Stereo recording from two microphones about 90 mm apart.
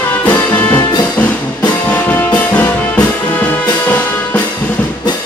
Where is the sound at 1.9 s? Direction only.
15° left (ahead or behind).